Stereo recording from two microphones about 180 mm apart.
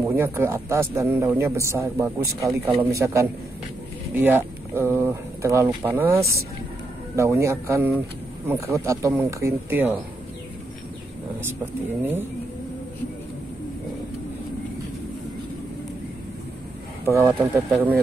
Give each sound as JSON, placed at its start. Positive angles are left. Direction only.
{"t": 0.1, "sound": "a man's voice", "side_deg": -15}
{"t": 17.0, "sound": "a man's voice", "side_deg": -15}